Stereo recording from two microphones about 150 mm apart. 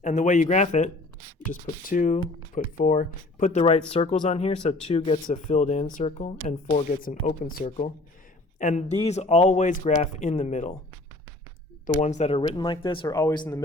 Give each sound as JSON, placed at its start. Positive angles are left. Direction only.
{"t": 0.0, "sound": "speech", "side_deg": 55}
{"t": 3.9, "sound": "speech", "side_deg": 40}
{"t": 11.9, "sound": "speech", "side_deg": 50}